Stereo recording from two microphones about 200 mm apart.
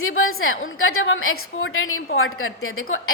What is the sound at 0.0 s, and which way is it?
A woman's voice, 90° left.